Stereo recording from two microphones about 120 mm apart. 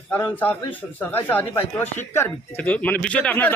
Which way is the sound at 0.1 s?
15° left (ahead or behind).